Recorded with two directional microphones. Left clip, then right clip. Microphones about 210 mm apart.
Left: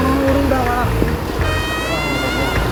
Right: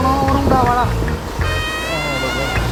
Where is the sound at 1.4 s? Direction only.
Centre (ahead or behind).